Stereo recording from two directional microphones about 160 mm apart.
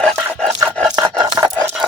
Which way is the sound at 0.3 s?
5° left (ahead or behind).